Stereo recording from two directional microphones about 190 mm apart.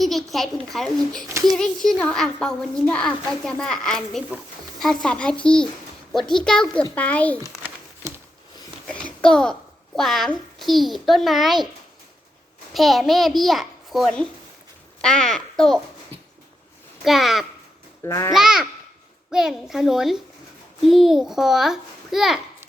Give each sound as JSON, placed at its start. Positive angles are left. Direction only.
{"t": 0.0, "sound": "a child's voice", "side_deg": 0}
{"t": 7.4, "sound": "a sound", "side_deg": -15}
{"t": 8.9, "sound": "a child's voice", "side_deg": 5}
{"t": 12.7, "sound": "a child's voice", "side_deg": 0}
{"t": 17.0, "sound": "a child's voice", "side_deg": 0}
{"t": 18.0, "sound": "a child's voice", "side_deg": 15}
{"t": 18.3, "sound": "a child's voice", "side_deg": 0}